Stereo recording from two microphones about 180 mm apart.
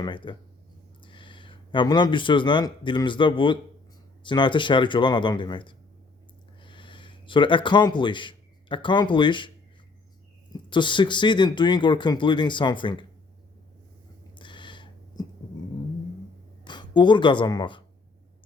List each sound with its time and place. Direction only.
0.0 s speech: 25° left (ahead or behind)
10.5 s speech: 25° left (ahead or behind)
14.3 s a sound: 25° left (ahead or behind)
16.6 s speech: 25° left (ahead or behind)